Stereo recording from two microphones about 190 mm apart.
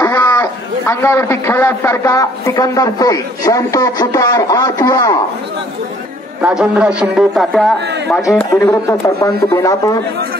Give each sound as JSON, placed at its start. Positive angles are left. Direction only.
{"t": 0.0, "sound": "a man's voice", "side_deg": 10}
{"t": 6.4, "sound": "a man's voice", "side_deg": -5}
{"t": 8.4, "sound": "a man's voice", "side_deg": 10}